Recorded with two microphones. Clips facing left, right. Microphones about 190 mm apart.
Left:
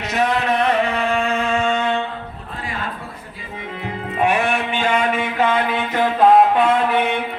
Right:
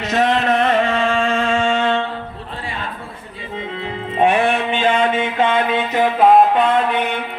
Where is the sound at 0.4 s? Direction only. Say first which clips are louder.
Right 2 dB; 50° right (ahead or behind).